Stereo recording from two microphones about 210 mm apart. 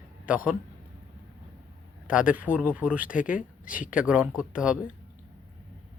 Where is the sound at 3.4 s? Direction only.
40° left (ahead or behind).